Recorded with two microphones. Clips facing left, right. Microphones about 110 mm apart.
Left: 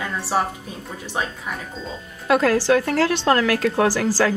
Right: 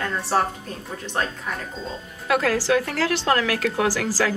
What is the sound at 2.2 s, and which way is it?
A woman's voice, 35° left (ahead or behind).